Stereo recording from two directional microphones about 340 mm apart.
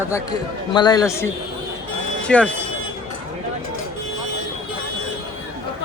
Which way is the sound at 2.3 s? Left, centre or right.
Centre.